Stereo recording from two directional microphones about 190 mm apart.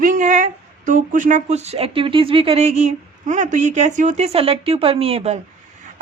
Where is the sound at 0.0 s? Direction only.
45° right (ahead or behind).